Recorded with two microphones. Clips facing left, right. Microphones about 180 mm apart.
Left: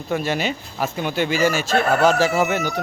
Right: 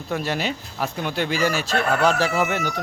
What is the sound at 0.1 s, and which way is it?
A man's voice, centre (ahead or behind).